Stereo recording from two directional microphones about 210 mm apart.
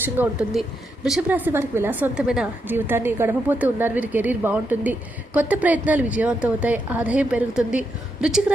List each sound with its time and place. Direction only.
0.0 s a woman's voice: 5° right (ahead or behind)